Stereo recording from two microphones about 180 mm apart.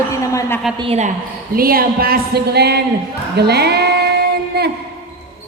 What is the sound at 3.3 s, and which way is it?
Female singing, 65° right (ahead or behind).